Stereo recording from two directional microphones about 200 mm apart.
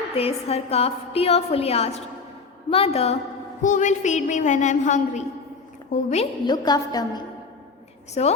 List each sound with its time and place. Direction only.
0.1 s a woman's voice: 30° left (ahead or behind)
6.4 s a woman's voice: 20° left (ahead or behind)
8.2 s a woman's voice: 30° left (ahead or behind)